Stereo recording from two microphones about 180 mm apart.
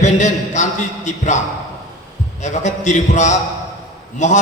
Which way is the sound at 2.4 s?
40° left (ahead or behind).